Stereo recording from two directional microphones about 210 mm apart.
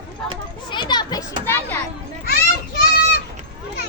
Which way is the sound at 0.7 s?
20° left (ahead or behind).